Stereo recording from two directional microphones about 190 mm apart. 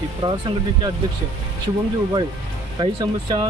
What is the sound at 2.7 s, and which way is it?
Speech, 20° right (ahead or behind).